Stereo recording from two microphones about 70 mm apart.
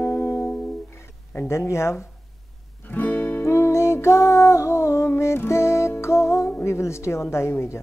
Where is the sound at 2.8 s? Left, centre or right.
Left.